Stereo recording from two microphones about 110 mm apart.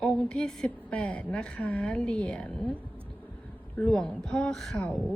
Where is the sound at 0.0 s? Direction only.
10° left (ahead or behind).